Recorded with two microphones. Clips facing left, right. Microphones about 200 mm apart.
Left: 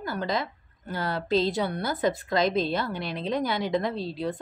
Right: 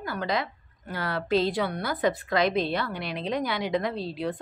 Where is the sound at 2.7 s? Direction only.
45° left (ahead or behind).